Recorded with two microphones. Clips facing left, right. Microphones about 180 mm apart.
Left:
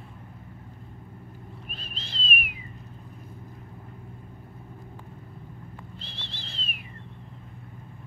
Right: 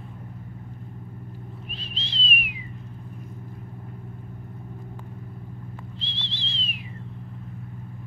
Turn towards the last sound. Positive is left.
turn(degrees=55)  # may be behind; listen again after turning